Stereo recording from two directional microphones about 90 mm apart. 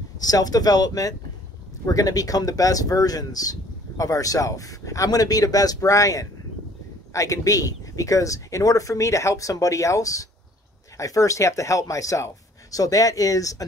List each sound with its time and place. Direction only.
0.2 s speech: 45° left (ahead or behind)